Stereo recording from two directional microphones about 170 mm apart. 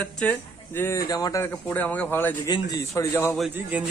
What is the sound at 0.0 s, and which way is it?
Speech, 5° left (ahead or behind).